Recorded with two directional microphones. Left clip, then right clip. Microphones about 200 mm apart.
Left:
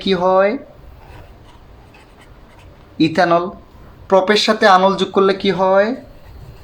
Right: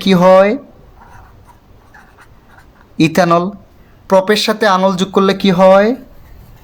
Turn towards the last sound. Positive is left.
turn(degrees=-55)  # may be behind; listen again after turning